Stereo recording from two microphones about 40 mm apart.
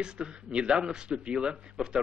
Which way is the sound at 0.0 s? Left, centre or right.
Right.